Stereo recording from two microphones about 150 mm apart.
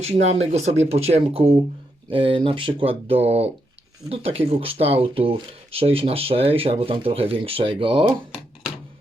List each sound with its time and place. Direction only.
0.0 s speech: 45° right (ahead or behind)